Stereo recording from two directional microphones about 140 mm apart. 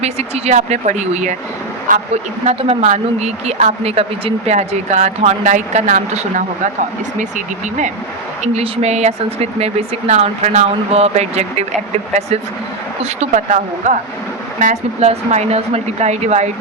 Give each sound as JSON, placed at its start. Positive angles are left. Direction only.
{"t": 0.0, "sound": "speech", "side_deg": -50}
{"t": 1.9, "sound": "speech", "side_deg": -75}
{"t": 2.5, "sound": "speech", "side_deg": -50}
{"t": 8.5, "sound": "speech", "side_deg": -45}
{"t": 13.0, "sound": "speech", "side_deg": -55}